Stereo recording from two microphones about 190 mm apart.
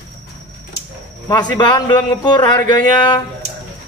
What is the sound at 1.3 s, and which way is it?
A man's voice, 20° left (ahead or behind).